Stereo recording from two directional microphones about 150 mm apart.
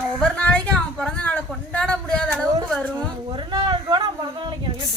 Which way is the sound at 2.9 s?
30° right (ahead or behind).